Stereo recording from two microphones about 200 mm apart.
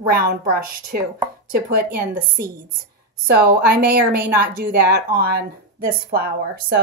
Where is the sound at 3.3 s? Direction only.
50° right (ahead or behind).